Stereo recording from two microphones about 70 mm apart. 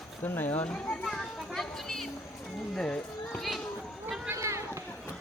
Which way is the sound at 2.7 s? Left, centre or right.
Centre.